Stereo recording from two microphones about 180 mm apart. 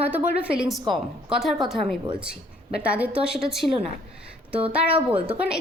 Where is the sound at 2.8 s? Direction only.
5° right (ahead or behind).